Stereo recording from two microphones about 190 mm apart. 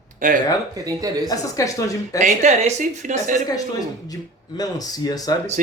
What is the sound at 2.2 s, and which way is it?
Speech, 40° right (ahead or behind).